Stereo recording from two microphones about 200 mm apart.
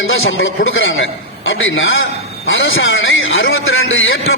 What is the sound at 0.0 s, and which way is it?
A man's voice, 80° left.